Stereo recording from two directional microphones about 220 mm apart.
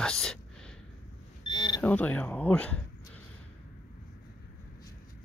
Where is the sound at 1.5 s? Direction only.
20° left (ahead or behind).